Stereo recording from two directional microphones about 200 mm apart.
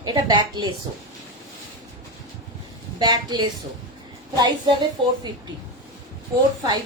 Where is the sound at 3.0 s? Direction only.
20° right (ahead or behind).